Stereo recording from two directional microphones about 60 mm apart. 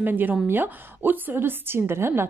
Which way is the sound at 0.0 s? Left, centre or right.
Right.